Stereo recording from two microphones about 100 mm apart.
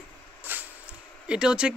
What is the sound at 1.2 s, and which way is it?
Speech, 10° right (ahead or behind).